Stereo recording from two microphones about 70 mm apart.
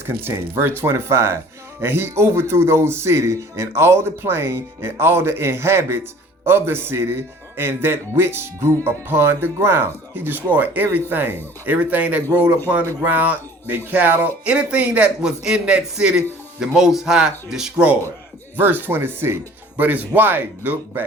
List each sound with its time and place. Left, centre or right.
0.0 s speech: right; by 17.8 s centre
18.5 s speech: right